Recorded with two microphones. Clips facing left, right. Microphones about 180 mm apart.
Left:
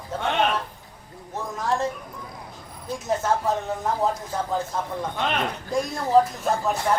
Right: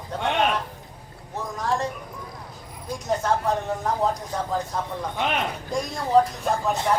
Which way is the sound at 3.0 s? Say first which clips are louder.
Even; centre (ahead or behind).